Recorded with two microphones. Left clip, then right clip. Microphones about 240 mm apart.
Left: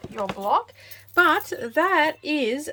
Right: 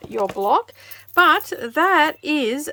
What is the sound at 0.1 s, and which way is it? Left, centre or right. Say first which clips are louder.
Speech: right 5 dB; right.